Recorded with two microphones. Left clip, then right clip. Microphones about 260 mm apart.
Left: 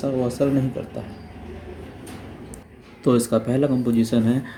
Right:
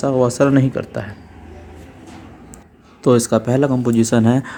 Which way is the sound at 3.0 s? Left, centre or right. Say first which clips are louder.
Right 5 dB; right.